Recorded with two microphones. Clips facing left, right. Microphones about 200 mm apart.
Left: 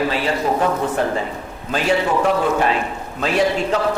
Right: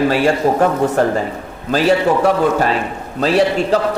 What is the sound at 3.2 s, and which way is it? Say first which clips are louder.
Speech: right 4 dB; 35° right (ahead or behind).